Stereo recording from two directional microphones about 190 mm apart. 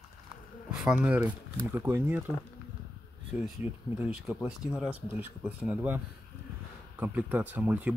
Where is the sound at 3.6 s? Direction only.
10° right (ahead or behind).